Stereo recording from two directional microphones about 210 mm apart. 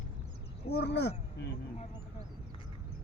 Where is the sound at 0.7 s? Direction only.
50° left (ahead or behind).